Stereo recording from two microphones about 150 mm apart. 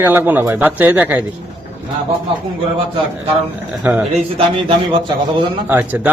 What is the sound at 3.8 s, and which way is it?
Speech, 10° right (ahead or behind).